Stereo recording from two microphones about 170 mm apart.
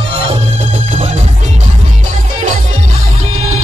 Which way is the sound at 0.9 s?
40° right (ahead or behind).